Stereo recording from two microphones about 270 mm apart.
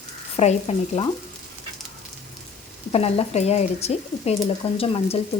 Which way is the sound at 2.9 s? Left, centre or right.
Left.